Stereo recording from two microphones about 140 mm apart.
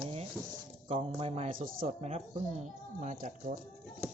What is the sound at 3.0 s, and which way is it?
Speech, 60° right (ahead or behind).